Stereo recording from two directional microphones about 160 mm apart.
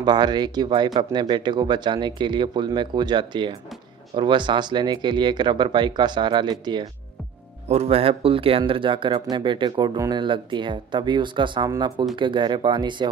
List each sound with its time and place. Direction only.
0.0 s speech: 25° right (ahead or behind)
7.6 s speech: 40° right (ahead or behind)